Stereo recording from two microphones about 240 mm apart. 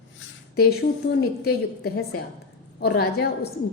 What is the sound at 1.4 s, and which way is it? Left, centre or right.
Speech, left.